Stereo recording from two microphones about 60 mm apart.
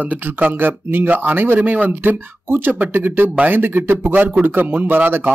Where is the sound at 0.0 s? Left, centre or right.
Right.